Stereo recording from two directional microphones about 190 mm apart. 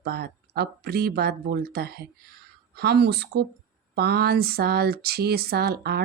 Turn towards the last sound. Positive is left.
turn(degrees=-55)  # may be behind; listen again after turning